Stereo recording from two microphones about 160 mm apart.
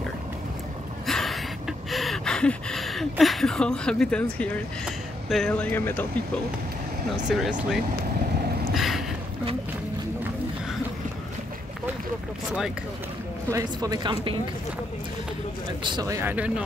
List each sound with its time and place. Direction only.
1.0 s gasp: centre (ahead or behind)
7.2 s speech: 5° right (ahead or behind)
8.7 s a sound: centre (ahead or behind)
13.5 s speech: 20° right (ahead or behind)
15.8 s speech: 25° right (ahead or behind); by 16.6 s 10° right (ahead or behind)